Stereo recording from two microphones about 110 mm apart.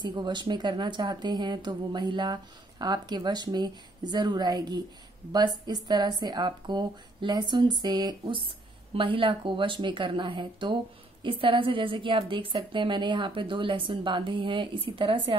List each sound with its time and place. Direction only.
0.0 s a woman's voice: 45° right (ahead or behind)